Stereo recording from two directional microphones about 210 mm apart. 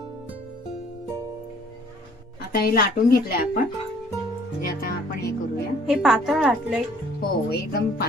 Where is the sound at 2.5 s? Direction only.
45° left (ahead or behind).